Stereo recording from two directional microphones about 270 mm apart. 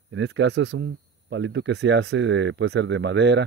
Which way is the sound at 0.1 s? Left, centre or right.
Right.